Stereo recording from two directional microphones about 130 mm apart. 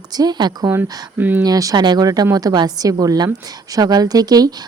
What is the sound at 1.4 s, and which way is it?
A woman's voice, 30° right (ahead or behind).